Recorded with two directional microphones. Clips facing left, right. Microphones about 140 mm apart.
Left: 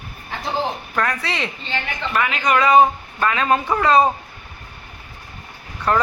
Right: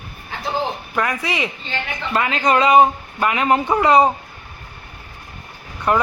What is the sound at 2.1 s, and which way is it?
Speech, 30° right (ahead or behind).